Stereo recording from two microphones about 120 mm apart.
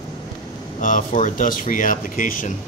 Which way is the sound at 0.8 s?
90° left.